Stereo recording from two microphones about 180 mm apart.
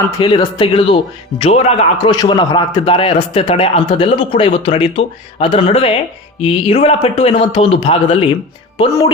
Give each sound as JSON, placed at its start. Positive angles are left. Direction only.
{"t": 0.2, "sound": "a man's voice", "side_deg": 25}
{"t": 2.0, "sound": "a man's voice", "side_deg": 25}